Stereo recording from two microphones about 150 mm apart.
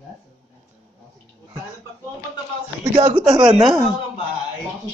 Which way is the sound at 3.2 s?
5° right (ahead or behind).